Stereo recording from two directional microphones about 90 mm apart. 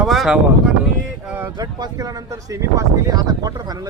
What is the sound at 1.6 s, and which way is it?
Speech, 45° right (ahead or behind).